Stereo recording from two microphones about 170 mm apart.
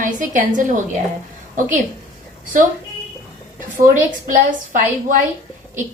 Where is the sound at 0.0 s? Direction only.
50° right (ahead or behind).